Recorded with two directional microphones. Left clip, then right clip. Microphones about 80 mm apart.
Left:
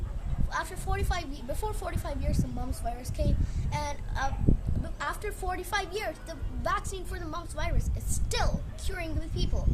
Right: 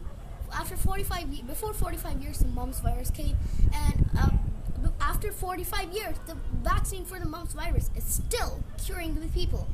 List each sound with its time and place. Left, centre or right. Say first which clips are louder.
0.5 s a woman's voice: left 1 dB; left